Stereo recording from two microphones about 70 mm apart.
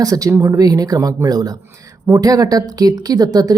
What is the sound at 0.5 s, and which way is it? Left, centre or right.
A woman's voice, right.